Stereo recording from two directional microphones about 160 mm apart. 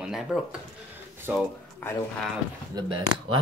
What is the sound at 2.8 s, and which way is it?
Speech, 30° right (ahead or behind).